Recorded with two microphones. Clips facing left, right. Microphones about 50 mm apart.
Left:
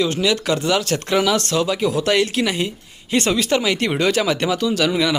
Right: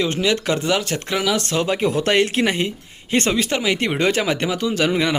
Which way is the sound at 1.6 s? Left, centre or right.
Right.